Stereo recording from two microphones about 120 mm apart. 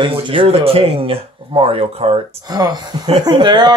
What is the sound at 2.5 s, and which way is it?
Speech, 35° right (ahead or behind).